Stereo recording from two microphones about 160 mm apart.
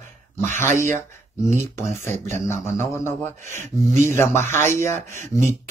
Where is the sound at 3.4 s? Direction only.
50° right (ahead or behind).